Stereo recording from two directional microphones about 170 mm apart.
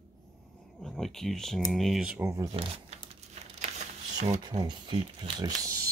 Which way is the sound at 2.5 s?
35° right (ahead or behind).